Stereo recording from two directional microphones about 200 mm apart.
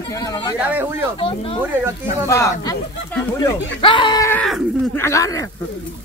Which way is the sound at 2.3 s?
15° left (ahead or behind).